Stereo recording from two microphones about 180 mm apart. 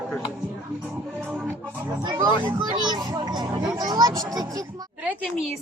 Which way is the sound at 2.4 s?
25° right (ahead or behind).